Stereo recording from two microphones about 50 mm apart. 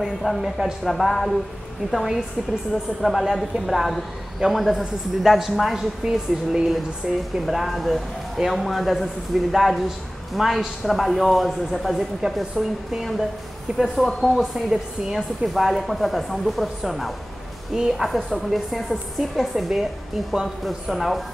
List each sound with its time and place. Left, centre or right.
0.2 s a man's voice: centre
2.7 s a man's voice: centre
13.7 s speech: centre
14.0 s a man's voice: centre